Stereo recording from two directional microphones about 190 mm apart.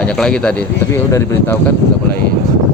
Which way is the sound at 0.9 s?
15° left (ahead or behind).